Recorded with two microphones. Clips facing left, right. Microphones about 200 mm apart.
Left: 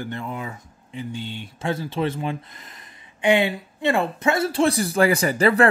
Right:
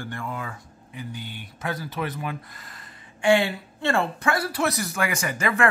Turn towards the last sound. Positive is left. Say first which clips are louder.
# left 6 dB
turn(degrees=35)  # may be behind; listen again after turning